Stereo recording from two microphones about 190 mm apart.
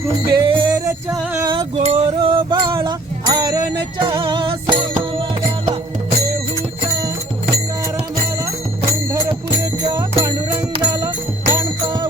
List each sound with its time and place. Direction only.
0.3 s music: 25° right (ahead or behind)
1.5 s a sound: 30° right (ahead or behind)
4.0 s music: 25° right (ahead or behind)
9.8 s music: 20° right (ahead or behind)